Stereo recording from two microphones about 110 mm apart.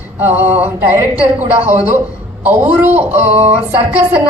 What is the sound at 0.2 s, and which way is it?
A woman's voice, 15° right (ahead or behind).